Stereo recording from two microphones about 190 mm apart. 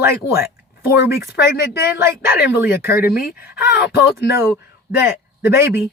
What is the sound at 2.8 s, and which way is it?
Speech, 55° left (ahead or behind).